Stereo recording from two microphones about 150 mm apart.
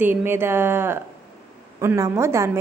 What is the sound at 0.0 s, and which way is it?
A woman's voice, 15° right (ahead or behind).